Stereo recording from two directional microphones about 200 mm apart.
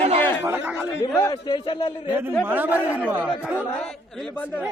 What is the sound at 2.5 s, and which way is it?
Speech, 10° right (ahead or behind).